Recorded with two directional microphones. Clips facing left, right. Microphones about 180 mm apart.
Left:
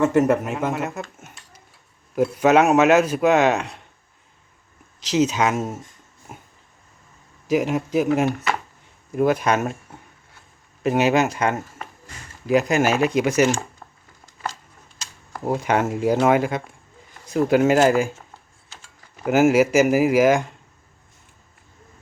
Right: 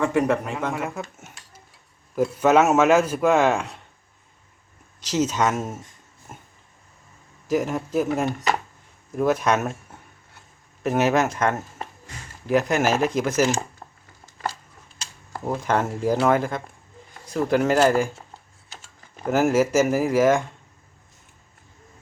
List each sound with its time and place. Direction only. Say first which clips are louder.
0.2 s speech: left 3 dB; 5° left (ahead or behind)
5.1 s speech: left 2 dB; 5° left (ahead or behind)
7.5 s speech: left 3 dB; 5° left (ahead or behind)
8.3 s speech: even; 20° right (ahead or behind)
9.1 s speech: left 2 dB; 5° left (ahead or behind)
10.8 s speech: left 2 dB; 5° left (ahead or behind)
15.4 s speech: left 3 dB; 15° left (ahead or behind)
15.7 s speech: left 2 dB; 5° left (ahead or behind)
19.2 s speech: left 3 dB; 5° left (ahead or behind)